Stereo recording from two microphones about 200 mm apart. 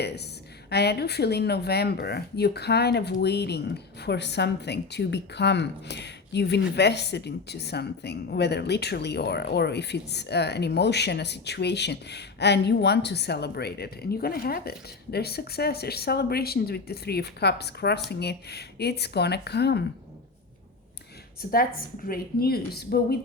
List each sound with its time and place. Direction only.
0.7 s speech: 55° left (ahead or behind)
21.5 s a woman's voice: 45° left (ahead or behind)